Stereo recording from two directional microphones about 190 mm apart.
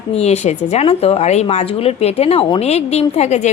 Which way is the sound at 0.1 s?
35° left (ahead or behind).